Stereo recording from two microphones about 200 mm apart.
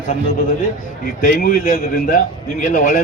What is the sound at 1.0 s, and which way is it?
A man's voice, 45° left (ahead or behind).